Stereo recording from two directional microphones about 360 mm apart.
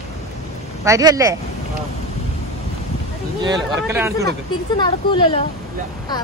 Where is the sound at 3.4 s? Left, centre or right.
Centre.